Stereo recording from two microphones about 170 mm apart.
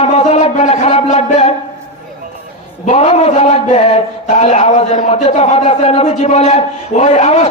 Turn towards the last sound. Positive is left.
turn(degrees=40)  # may be behind; listen again after turning